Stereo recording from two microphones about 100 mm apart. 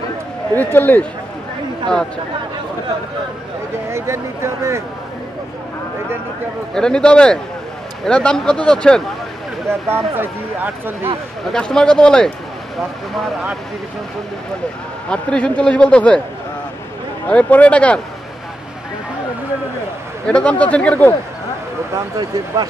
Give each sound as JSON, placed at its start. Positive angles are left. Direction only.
{"t": 0.6, "sound": "speech", "side_deg": 20}
{"t": 3.9, "sound": "speech", "side_deg": -30}
{"t": 6.7, "sound": "speech", "side_deg": 5}
{"t": 9.7, "sound": "speech", "side_deg": -20}
{"t": 11.5, "sound": "speech", "side_deg": 10}
{"t": 15.0, "sound": "speech", "side_deg": 10}
{"t": 17.3, "sound": "speech", "side_deg": 15}
{"t": 20.2, "sound": "speech", "side_deg": 10}
{"t": 21.9, "sound": "speech", "side_deg": -40}